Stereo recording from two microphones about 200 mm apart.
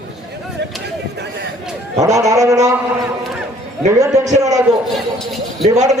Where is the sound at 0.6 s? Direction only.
60° right (ahead or behind).